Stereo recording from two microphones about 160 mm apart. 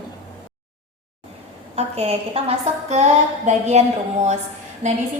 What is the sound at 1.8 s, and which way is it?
A woman's voice, 40° right (ahead or behind).